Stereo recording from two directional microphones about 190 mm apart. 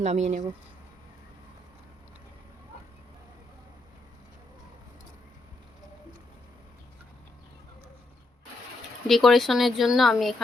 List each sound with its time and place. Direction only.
0.0 s speech: 35° right (ahead or behind)
9.0 s speech: centre (ahead or behind)